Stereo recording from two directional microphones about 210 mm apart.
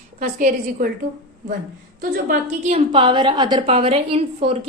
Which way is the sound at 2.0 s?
35° right (ahead or behind).